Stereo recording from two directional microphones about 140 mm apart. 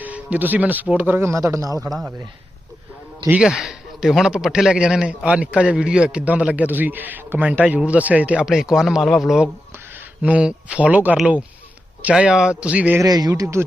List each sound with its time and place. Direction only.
0.0 s a man's voice: 10° right (ahead or behind)
1.9 s a man's voice: centre (ahead or behind)
3.2 s a man's voice: 5° right (ahead or behind)
13.0 s speech: 30° right (ahead or behind)